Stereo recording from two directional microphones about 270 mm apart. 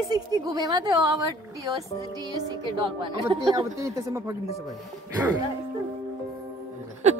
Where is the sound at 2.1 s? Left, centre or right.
Centre.